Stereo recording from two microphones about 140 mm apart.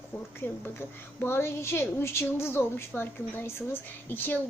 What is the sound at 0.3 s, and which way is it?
A woman's voice, 15° left (ahead or behind).